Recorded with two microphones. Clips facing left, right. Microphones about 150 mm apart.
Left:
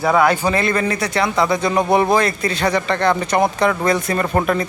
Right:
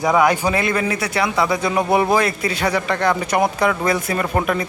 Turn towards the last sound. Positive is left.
turn(degrees=-5)  # may be behind; listen again after turning